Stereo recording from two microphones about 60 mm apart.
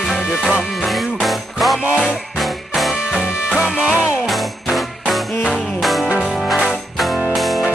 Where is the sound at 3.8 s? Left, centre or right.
Right.